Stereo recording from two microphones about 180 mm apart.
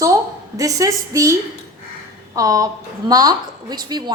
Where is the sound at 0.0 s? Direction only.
20° right (ahead or behind).